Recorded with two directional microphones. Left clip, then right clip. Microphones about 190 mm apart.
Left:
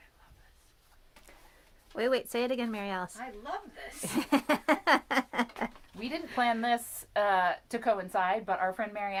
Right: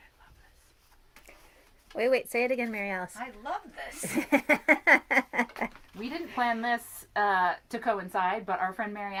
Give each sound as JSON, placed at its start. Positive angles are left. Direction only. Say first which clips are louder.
{"t": 2.0, "sound": "speech", "louder": "right 3 dB", "side_deg": 5}
{"t": 4.0, "sound": "a sound", "louder": "right 3 dB", "side_deg": 0}
{"t": 6.3, "sound": "a woman's voice", "louder": "even", "side_deg": 40}